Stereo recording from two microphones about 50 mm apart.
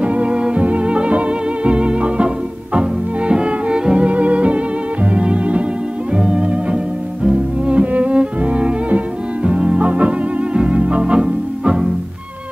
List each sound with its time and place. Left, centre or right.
0.0 s music: right